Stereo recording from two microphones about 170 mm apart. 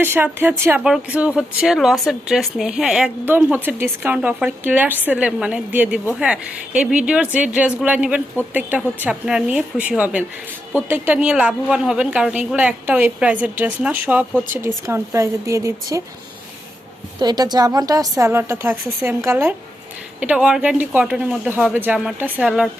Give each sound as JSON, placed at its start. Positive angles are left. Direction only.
{"t": 0.0, "sound": "speech", "side_deg": -10}
{"t": 17.2, "sound": "a woman's voice", "side_deg": -25}